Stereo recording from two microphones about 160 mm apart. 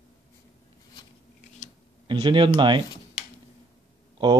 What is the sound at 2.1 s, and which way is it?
Speech, 30° right (ahead or behind).